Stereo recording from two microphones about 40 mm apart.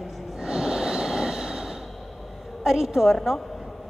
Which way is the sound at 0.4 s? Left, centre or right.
Centre.